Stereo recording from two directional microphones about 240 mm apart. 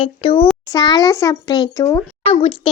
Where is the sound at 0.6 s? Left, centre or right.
Centre.